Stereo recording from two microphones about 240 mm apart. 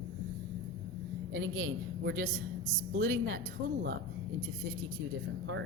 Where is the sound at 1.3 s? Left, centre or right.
Right.